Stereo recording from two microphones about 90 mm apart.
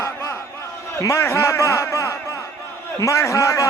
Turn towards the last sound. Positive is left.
turn(degrees=35)  # may be behind; listen again after turning